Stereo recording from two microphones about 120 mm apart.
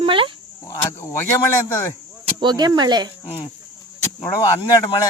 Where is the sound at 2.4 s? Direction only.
35° right (ahead or behind).